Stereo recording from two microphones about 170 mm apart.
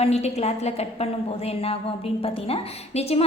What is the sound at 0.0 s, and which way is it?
Speech, 40° left (ahead or behind).